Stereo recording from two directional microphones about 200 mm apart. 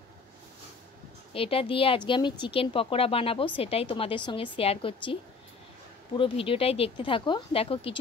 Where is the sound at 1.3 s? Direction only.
25° left (ahead or behind).